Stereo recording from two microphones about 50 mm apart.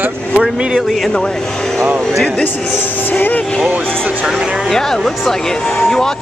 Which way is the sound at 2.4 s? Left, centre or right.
Left.